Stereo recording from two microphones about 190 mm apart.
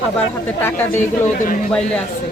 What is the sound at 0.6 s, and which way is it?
Speech, 10° left (ahead or behind).